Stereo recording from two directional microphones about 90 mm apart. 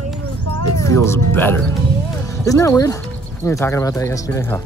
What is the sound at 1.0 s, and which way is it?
Speech, 25° left (ahead or behind).